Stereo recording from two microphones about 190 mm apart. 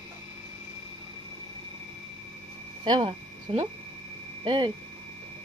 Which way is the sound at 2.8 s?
25° right (ahead or behind).